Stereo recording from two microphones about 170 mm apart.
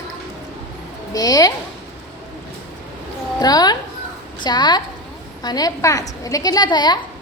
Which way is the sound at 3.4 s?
25° left (ahead or behind).